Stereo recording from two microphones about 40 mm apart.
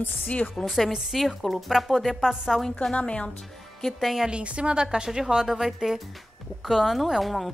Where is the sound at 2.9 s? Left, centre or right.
Left.